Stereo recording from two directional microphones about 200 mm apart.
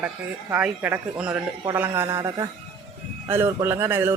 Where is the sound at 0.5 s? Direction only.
10° right (ahead or behind).